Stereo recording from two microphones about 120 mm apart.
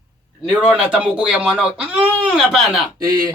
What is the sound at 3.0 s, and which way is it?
Speech, 35° right (ahead or behind).